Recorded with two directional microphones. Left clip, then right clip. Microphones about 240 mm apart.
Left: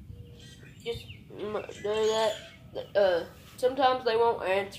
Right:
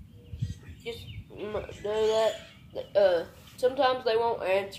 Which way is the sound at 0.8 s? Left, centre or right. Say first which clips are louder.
Left 3 dB; centre.